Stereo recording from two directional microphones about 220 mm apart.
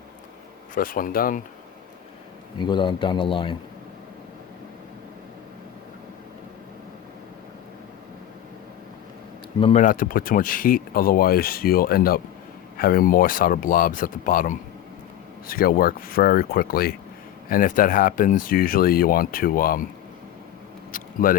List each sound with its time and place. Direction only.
0.7 s speech: 40° left (ahead or behind)
2.6 s speech: 20° left (ahead or behind)
9.6 s speech: 30° left (ahead or behind)
20.9 s a sound: 40° left (ahead or behind)